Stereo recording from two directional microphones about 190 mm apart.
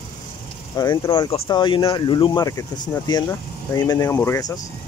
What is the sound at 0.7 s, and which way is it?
Speech, 20° left (ahead or behind).